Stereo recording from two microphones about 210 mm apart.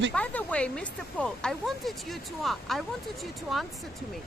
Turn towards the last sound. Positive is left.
turn(degrees=0)  # may be behind; listen again after turning